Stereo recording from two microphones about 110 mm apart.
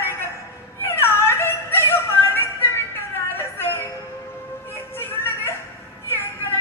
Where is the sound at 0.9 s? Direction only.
20° left (ahead or behind).